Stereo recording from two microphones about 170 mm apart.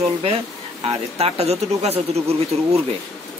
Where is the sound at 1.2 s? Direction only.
40° right (ahead or behind).